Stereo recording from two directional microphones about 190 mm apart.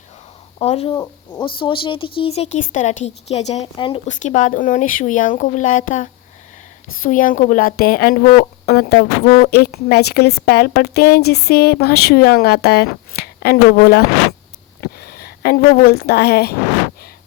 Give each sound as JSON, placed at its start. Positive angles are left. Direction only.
{"t": 0.6, "sound": "speech", "side_deg": 35}
{"t": 0.9, "sound": "speech", "side_deg": 15}
{"t": 6.8, "sound": "a woman's voice", "side_deg": 90}
{"t": 7.1, "sound": "speech", "side_deg": 45}